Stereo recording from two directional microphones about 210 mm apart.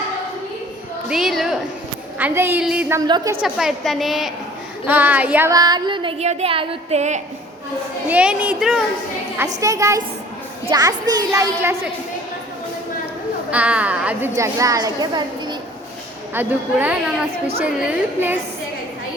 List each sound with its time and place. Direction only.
1.0 s a sound: centre (ahead or behind)
2.1 s a woman's voice: 10° right (ahead or behind)
3.0 s a woman's voice: 15° right (ahead or behind)
3.4 s a woman's voice: centre (ahead or behind)
4.9 s a sound: 10° right (ahead or behind); by 7.2 s 30° right (ahead or behind)
8.0 s a woman's voice: 5° right (ahead or behind)
9.6 s a woman's voice: 15° right (ahead or behind)
13.5 s a woman's voice: 5° right (ahead or behind)
16.3 s a woman's voice: 10° right (ahead or behind)